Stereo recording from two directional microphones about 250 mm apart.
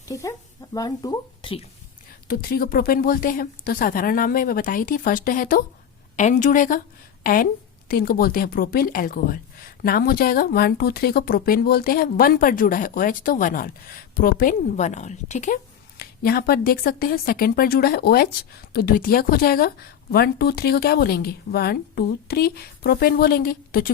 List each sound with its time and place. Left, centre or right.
0.1 s a woman's voice: centre
2.2 s speech: left
7.9 s speech: left